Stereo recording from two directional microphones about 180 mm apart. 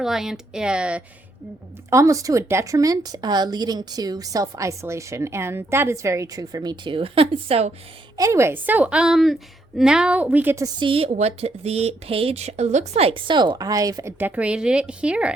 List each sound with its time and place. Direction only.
0.0 s speech: centre (ahead or behind)
1.9 s a woman's voice: 15° right (ahead or behind); by 7.7 s 35° right (ahead or behind)
8.1 s a woman's voice: 15° right (ahead or behind)
10.8 s a woman's voice: 30° right (ahead or behind); by 15.4 s 5° right (ahead or behind)